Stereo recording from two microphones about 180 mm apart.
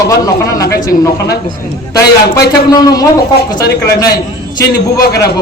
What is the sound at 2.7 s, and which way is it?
Speech, 20° left (ahead or behind).